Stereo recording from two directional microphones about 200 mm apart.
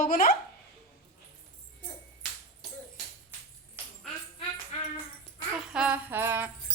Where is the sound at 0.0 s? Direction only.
45° left (ahead or behind).